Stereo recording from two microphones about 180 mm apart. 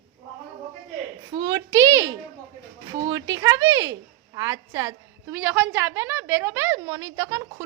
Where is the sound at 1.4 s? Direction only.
90° right.